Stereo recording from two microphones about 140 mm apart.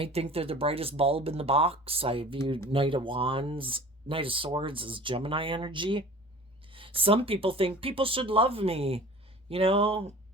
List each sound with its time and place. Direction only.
0.0 s speech: 45° right (ahead or behind)